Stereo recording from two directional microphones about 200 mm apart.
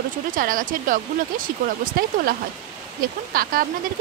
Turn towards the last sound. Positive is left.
turn(degrees=-45)  # may be behind; listen again after turning